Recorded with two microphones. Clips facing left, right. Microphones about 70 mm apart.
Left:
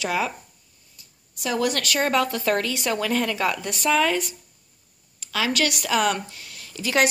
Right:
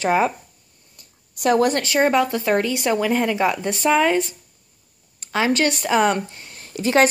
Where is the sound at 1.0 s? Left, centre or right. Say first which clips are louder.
Right 9 dB; right.